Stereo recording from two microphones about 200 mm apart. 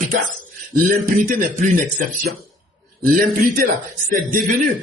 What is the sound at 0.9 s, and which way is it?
Speech, 45° right (ahead or behind).